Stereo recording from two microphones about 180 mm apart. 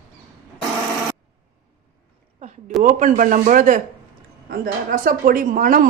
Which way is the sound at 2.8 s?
45° right (ahead or behind).